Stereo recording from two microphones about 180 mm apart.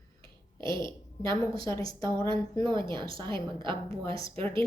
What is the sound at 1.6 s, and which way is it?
Speech, 15° left (ahead or behind).